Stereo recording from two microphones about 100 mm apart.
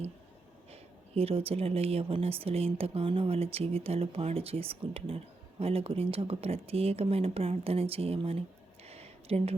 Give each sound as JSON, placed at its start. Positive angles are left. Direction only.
{"t": 0.7, "sound": "speech", "side_deg": -80}
{"t": 2.1, "sound": "speech", "side_deg": -75}